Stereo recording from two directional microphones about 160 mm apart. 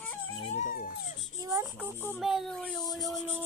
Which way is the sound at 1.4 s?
20° right (ahead or behind).